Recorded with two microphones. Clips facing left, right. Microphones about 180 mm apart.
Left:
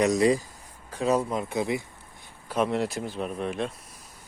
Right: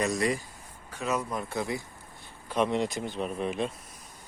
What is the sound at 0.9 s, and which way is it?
Speech, 35° left (ahead or behind).